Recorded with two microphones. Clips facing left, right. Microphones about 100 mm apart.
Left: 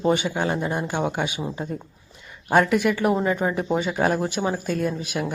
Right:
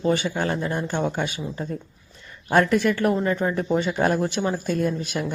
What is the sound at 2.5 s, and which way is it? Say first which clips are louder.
Speech: even; 10° left (ahead or behind).